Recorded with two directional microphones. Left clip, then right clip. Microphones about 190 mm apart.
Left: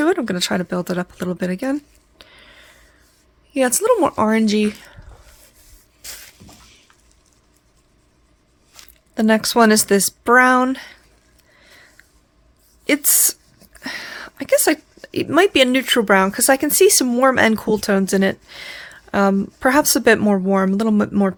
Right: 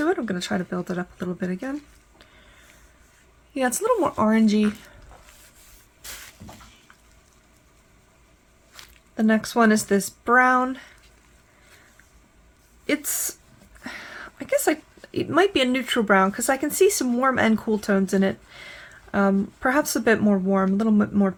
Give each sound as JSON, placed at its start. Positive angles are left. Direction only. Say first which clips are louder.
{"t": 0.0, "sound": "speech", "louder": "left 6 dB", "side_deg": 55}
{"t": 2.1, "sound": "a sound", "louder": "left 8 dB", "side_deg": 55}
{"t": 3.5, "sound": "speech", "louder": "left 6 dB", "side_deg": 50}
{"t": 9.1, "sound": "speech", "louder": "left 6 dB", "side_deg": 55}
{"t": 12.8, "sound": "a woman's voice", "louder": "left 8 dB", "side_deg": 50}